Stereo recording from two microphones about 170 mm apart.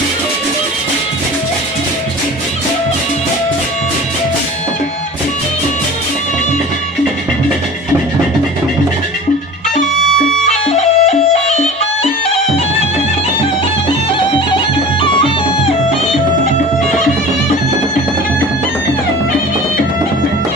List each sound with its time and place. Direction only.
10.4 s music: 40° left (ahead or behind)